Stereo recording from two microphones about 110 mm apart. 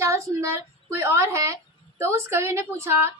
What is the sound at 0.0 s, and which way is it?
A woman's voice, 25° right (ahead or behind).